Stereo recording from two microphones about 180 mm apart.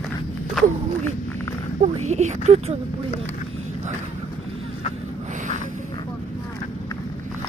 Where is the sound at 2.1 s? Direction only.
40° right (ahead or behind).